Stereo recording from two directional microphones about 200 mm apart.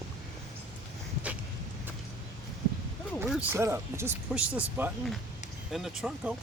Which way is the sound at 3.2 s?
Centre (ahead or behind).